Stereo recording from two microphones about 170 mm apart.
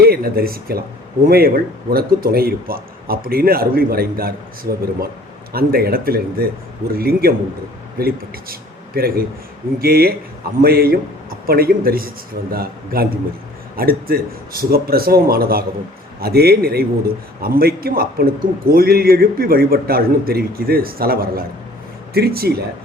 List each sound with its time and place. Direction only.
0.0 s speech: 65° right (ahead or behind)